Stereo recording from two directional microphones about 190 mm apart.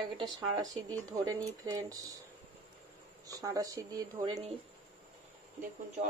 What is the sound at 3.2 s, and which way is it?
Speech, 20° right (ahead or behind).